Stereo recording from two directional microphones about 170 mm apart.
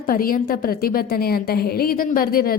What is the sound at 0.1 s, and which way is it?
A woman's voice, 55° left (ahead or behind).